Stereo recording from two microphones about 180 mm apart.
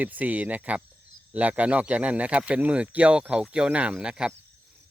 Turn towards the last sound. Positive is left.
turn(degrees=-5)  # may be behind; listen again after turning